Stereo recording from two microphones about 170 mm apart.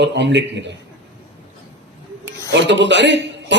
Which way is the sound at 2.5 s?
90° right.